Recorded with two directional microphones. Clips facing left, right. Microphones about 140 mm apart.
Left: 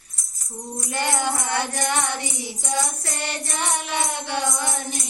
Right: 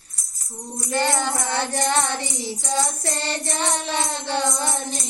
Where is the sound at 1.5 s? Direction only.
25° right (ahead or behind).